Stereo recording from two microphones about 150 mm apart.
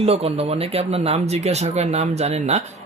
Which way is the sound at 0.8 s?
45° right (ahead or behind).